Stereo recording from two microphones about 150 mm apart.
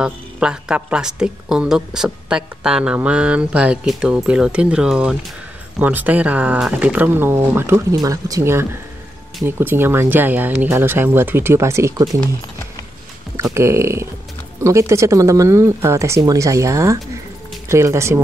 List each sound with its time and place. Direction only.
0.0 s a woman's voice: 5° right (ahead or behind)
13.4 s a woman's voice: 20° right (ahead or behind)